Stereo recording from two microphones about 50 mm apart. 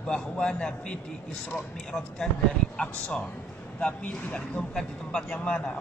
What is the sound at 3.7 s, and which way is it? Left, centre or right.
Speech, left.